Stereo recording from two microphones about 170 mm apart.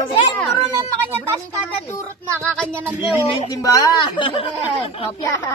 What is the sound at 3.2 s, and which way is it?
Speech, 30° left (ahead or behind).